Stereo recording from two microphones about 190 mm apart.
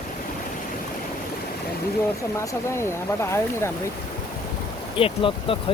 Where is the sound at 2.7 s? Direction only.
15° left (ahead or behind).